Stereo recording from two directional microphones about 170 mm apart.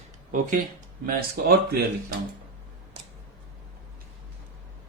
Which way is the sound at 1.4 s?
60° right (ahead or behind).